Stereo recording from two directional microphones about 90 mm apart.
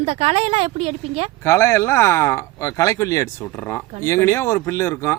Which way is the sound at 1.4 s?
30° left (ahead or behind).